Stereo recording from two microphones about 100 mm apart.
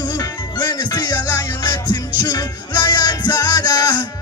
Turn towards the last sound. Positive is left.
turn(degrees=45)  # may be behind; listen again after turning